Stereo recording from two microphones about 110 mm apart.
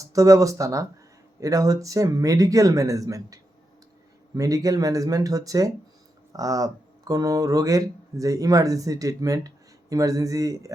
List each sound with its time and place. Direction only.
0.0 s speech: 30° right (ahead or behind)